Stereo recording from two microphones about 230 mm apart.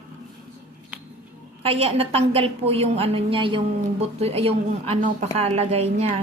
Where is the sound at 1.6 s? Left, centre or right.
Right.